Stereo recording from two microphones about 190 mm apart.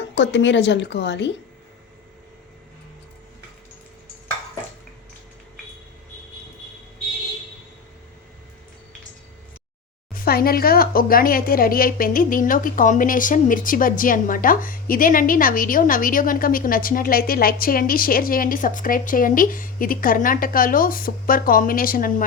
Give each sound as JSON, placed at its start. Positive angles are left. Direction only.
{"t": 0.0, "sound": "a woman's voice", "side_deg": 70}
{"t": 10.2, "sound": "speech", "side_deg": 50}